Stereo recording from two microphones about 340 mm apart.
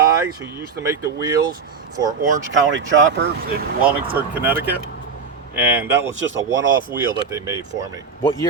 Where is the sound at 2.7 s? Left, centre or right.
Right.